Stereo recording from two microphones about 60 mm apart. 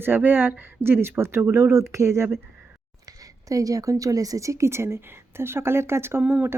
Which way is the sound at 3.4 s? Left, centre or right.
Right.